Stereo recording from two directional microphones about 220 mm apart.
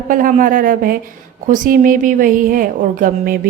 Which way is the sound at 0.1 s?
35° right (ahead or behind).